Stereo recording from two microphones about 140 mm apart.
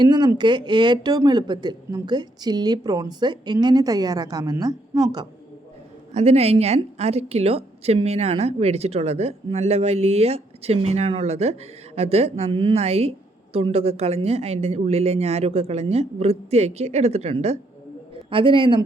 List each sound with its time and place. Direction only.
0.0 s speech: 30° right (ahead or behind)
6.1 s a woman's voice: 50° right (ahead or behind)
12.7 s a woman's voice: 50° right (ahead or behind)
18.3 s a man's voice: 40° right (ahead or behind)